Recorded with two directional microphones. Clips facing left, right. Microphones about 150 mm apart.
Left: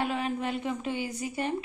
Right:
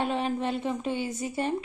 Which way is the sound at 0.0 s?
30° right (ahead or behind).